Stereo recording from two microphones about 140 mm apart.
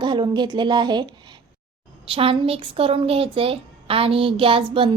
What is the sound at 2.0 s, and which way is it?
A woman's voice, 40° right (ahead or behind).